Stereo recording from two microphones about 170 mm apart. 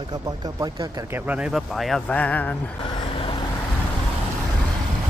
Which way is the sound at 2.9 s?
30° left (ahead or behind).